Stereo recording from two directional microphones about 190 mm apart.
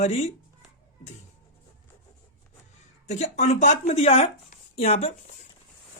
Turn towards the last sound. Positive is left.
turn(degrees=35)  # may be behind; listen again after turning